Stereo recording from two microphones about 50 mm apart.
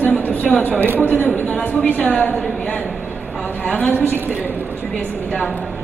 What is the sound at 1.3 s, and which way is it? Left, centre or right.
A woman's voice, left.